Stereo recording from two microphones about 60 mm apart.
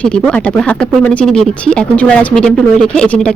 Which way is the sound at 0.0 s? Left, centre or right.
Left.